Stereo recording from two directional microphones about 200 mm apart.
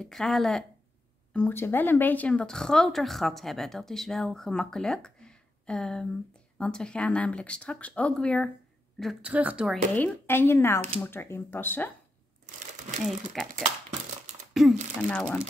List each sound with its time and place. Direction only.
0.0 s speech: centre (ahead or behind)
9.0 s speech: 5° right (ahead or behind)
9.9 s speech: 10° left (ahead or behind)
12.4 s crumpling: 40° right (ahead or behind)
14.5 s a sound: centre (ahead or behind)
15.0 s speech: 5° left (ahead or behind)